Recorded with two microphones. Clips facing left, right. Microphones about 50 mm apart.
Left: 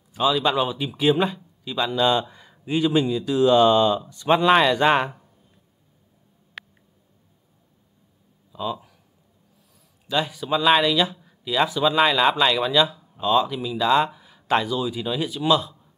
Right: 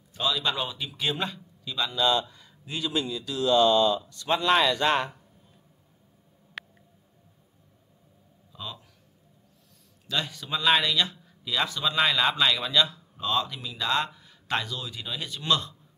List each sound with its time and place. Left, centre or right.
0.1 s speech: centre
6.6 s a sound: centre
8.5 s speech: centre
10.0 s speech: centre